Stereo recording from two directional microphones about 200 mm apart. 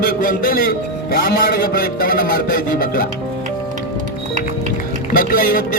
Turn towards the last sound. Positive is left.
turn(degrees=45)  # may be behind; listen again after turning